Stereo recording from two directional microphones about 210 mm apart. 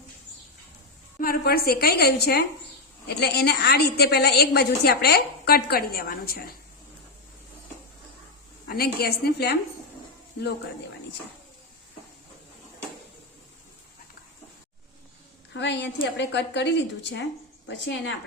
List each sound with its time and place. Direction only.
1.2 s a woman's voice: 45° left (ahead or behind)
8.7 s a woman's voice: 45° left (ahead or behind)
15.5 s speech: 55° left (ahead or behind)